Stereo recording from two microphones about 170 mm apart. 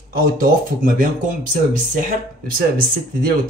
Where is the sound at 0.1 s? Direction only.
60° right (ahead or behind).